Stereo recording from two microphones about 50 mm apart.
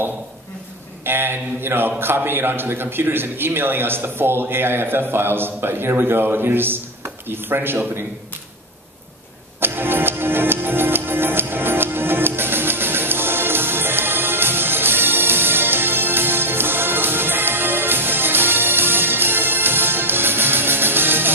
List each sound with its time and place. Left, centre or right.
1.0 s a man's voice: right
9.6 s music: right